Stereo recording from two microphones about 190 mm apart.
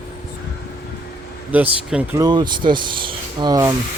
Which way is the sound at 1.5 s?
5° right (ahead or behind).